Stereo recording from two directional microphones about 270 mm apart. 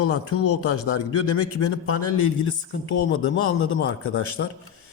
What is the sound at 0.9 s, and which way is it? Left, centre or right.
A man's voice, left.